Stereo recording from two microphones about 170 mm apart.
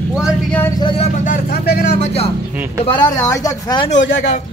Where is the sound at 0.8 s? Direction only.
30° left (ahead or behind).